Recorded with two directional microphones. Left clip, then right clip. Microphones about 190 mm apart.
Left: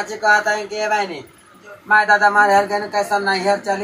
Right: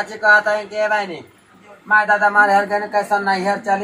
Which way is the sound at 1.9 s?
20° right (ahead or behind).